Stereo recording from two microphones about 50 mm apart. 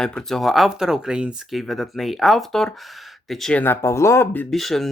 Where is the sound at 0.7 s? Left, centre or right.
Centre.